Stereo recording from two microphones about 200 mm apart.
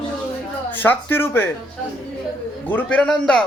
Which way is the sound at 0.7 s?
10° left (ahead or behind).